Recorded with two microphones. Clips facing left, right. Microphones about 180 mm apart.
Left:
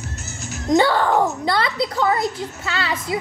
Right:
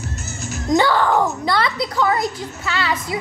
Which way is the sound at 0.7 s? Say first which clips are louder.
Even; 25° left (ahead or behind).